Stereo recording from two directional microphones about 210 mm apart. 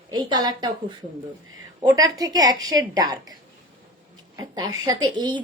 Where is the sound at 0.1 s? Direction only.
20° right (ahead or behind).